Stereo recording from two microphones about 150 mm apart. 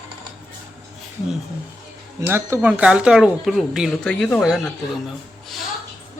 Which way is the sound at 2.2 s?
15° right (ahead or behind).